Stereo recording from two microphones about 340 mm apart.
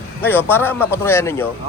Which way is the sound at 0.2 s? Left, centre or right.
Centre.